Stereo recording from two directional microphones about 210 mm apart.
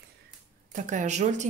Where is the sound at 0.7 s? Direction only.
35° right (ahead or behind).